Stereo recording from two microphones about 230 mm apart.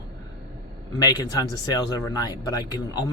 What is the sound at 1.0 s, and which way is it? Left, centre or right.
Speech, centre.